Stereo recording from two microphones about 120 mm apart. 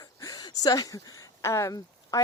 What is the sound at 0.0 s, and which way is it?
Speech, 30° left (ahead or behind).